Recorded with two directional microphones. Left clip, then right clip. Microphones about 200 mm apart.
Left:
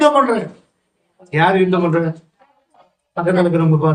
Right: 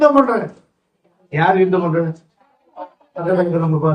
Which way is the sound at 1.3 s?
45° left (ahead or behind).